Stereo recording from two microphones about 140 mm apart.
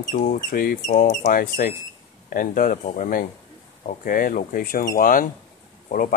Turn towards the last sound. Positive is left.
turn(degrees=75)  # may be behind; listen again after turning